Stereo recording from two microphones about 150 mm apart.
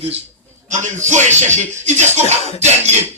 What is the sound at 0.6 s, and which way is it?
A man's voice, 55° right (ahead or behind).